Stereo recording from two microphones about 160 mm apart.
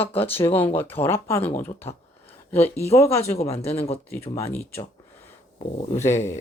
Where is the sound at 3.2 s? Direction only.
40° left (ahead or behind).